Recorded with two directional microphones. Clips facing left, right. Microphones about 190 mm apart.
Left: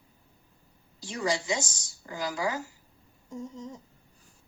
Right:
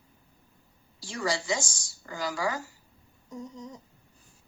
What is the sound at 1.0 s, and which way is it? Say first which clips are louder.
Speech: left 1 dB; 20° left (ahead or behind).